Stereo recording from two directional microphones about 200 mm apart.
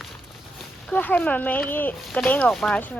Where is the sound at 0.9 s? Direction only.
5° left (ahead or behind).